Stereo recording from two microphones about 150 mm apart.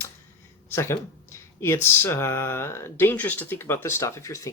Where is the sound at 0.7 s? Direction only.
15° left (ahead or behind).